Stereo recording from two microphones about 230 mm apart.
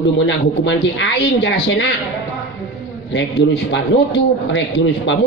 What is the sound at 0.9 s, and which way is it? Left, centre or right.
Speech, left.